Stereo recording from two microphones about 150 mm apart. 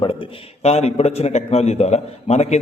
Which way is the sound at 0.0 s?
35° left (ahead or behind).